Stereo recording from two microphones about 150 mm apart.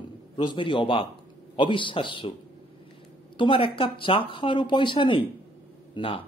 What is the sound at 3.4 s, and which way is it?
Speech, 35° left (ahead or behind).